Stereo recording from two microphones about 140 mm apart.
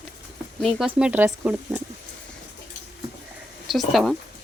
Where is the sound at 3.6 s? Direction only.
Centre (ahead or behind).